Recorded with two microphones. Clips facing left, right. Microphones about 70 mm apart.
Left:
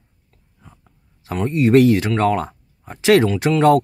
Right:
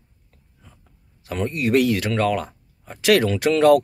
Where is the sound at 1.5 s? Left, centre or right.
Left.